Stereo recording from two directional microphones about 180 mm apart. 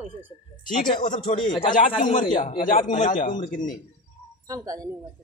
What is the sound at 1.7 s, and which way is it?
Speech, 50° left (ahead or behind).